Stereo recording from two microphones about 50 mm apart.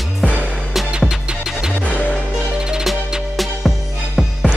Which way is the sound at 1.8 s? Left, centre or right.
Right.